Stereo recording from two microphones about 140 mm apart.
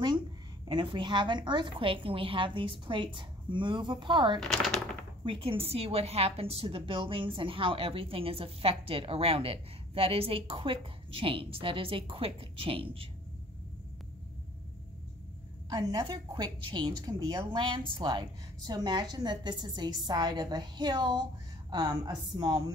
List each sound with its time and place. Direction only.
0.7 s a woman's voice: 35° right (ahead or behind)
4.4 s speech: 5° left (ahead or behind)
5.2 s a woman's voice: 40° right (ahead or behind)
15.7 s a woman's voice: 30° right (ahead or behind)